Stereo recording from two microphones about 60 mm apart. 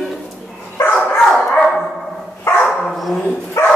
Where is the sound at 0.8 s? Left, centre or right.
Left.